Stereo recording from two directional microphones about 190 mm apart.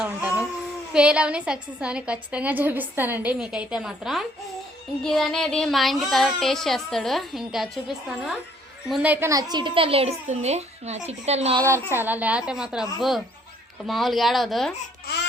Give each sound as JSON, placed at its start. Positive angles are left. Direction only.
{"t": 0.0, "sound": "baby cry", "side_deg": -5}
{"t": 0.9, "sound": "a woman's voice", "side_deg": -5}
{"t": 9.3, "sound": "a child's voice", "side_deg": -20}
{"t": 11.5, "sound": "a woman's voice", "side_deg": -15}